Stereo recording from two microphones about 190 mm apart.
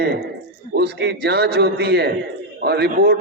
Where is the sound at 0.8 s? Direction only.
60° right (ahead or behind).